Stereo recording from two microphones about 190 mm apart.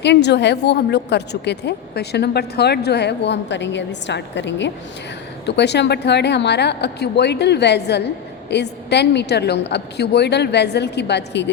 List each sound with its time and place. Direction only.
0.0 s a woman's voice: 65° left (ahead or behind)